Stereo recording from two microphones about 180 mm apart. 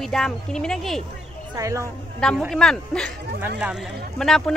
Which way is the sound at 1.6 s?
15° right (ahead or behind).